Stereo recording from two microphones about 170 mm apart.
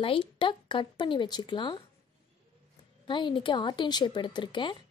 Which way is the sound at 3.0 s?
30° left (ahead or behind).